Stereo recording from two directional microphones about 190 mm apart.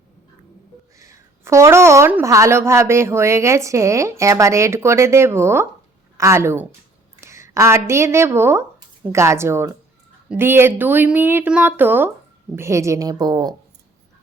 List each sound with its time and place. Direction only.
0.9 s a woman's voice: 15° right (ahead or behind)